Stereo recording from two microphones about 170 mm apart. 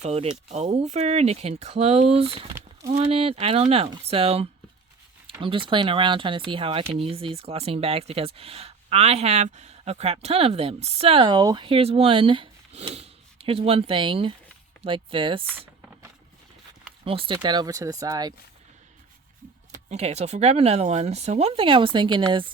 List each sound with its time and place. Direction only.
0.0 s speech: 40° right (ahead or behind)
17.0 s speech: 30° right (ahead or behind)
19.7 s speech: 40° right (ahead or behind)